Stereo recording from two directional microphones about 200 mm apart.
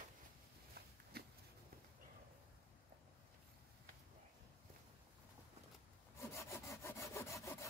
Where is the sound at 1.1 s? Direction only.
50° right (ahead or behind).